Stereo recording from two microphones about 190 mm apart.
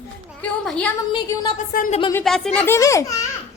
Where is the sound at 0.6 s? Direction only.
5° left (ahead or behind).